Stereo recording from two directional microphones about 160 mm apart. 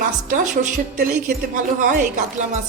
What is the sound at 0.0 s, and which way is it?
A woman's voice, 55° right (ahead or behind).